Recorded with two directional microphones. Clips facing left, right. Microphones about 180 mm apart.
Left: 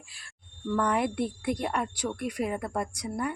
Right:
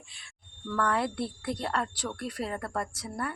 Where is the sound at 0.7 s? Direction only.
15° left (ahead or behind).